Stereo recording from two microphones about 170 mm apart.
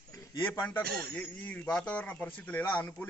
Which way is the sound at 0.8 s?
65° right (ahead or behind).